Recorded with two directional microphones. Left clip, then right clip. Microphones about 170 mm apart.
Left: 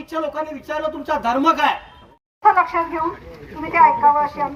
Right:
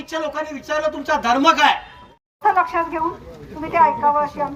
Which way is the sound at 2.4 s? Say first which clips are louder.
Left 2 dB; 20° right (ahead or behind).